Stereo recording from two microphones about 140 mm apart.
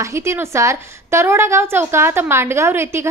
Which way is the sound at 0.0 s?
20° right (ahead or behind).